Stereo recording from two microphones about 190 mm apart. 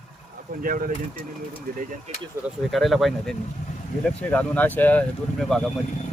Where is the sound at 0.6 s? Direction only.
50° right (ahead or behind).